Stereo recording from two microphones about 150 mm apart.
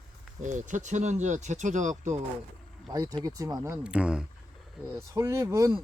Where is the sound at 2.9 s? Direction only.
25° right (ahead or behind).